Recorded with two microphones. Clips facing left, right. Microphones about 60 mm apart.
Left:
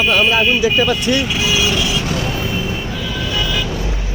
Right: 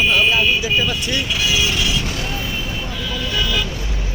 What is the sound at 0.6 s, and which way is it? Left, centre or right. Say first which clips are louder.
Speech: left 5 dB; left.